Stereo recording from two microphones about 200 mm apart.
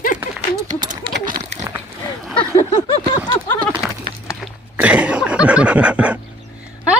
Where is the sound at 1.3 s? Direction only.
45° right (ahead or behind).